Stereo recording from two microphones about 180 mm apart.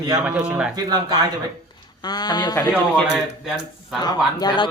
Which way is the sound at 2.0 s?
25° left (ahead or behind).